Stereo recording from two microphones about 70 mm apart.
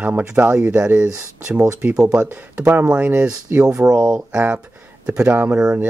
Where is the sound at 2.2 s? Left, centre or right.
Right.